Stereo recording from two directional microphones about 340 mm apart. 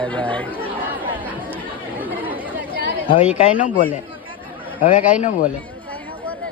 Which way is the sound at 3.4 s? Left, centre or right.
Left.